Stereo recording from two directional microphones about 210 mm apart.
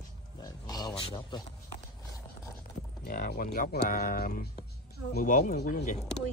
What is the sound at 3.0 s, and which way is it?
Speech, 45° left (ahead or behind).